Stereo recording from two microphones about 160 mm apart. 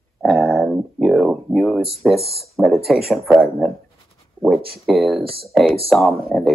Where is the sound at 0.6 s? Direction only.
Centre (ahead or behind).